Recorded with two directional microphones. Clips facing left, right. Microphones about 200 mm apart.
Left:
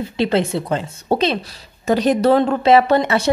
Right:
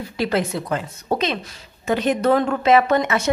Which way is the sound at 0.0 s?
25° left (ahead or behind).